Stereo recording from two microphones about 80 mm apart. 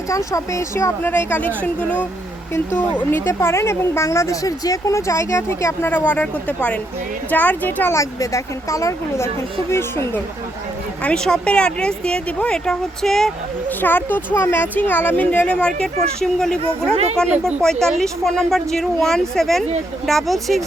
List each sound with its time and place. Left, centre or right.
0.1 s a woman's voice: left
5.9 s speech: centre
7.9 s a woman's voice: left
11.0 s speech: centre
13.7 s speech: left; by 20.6 s centre